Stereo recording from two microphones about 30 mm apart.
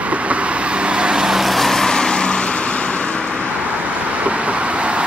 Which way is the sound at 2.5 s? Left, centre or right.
Left.